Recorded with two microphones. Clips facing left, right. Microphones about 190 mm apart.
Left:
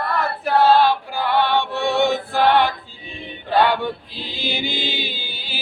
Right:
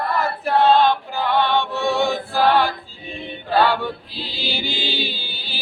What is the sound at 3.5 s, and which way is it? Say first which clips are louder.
Male singing: left 1 dB; 15° left (ahead or behind).